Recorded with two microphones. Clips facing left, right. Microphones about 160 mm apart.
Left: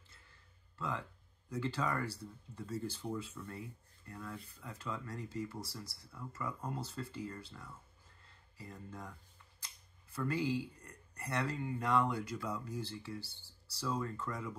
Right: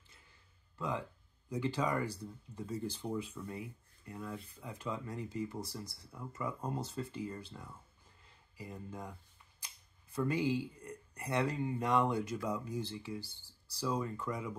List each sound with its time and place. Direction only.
0.7 s speech: 20° right (ahead or behind)
10.1 s speech: 20° right (ahead or behind)